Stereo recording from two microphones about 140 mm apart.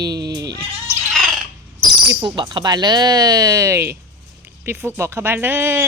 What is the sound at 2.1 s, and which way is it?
Speech, 35° right (ahead or behind).